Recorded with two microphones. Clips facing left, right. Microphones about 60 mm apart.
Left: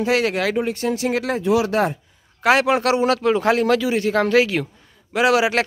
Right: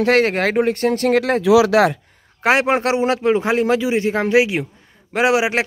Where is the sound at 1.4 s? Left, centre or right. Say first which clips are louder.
Right 6 dB; right.